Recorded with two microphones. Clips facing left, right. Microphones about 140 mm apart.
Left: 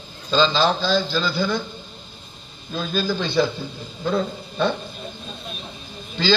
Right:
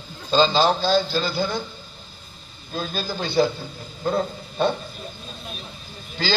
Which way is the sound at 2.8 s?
40° right (ahead or behind).